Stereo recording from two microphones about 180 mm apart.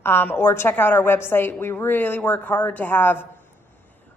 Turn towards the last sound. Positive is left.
turn(degrees=10)  # may be behind; listen again after turning